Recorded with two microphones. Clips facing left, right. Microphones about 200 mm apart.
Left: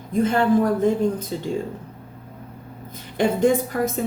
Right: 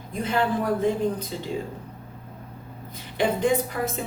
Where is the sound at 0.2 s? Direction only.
50° left (ahead or behind).